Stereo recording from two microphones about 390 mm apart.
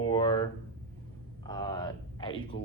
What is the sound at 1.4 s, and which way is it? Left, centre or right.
Speech, centre.